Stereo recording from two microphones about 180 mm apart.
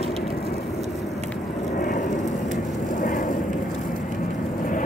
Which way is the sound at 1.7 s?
40° left (ahead or behind).